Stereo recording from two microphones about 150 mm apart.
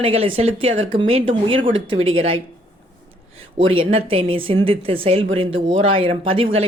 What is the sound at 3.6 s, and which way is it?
Speech, 40° right (ahead or behind).